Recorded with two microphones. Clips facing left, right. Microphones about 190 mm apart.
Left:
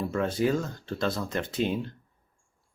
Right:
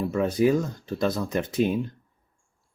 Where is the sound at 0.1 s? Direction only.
20° right (ahead or behind).